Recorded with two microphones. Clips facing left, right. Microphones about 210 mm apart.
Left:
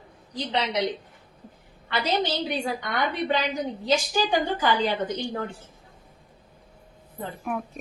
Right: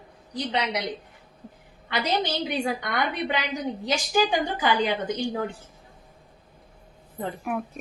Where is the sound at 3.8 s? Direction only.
15° right (ahead or behind).